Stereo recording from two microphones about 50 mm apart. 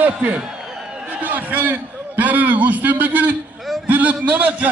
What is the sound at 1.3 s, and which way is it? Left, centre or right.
A man's voice, right.